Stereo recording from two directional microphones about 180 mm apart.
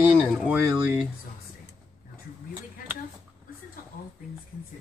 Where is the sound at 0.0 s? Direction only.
10° right (ahead or behind).